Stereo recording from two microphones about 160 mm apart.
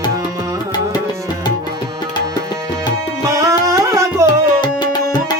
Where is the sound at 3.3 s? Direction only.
20° right (ahead or behind).